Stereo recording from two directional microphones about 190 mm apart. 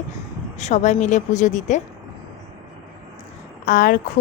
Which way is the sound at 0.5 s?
35° left (ahead or behind).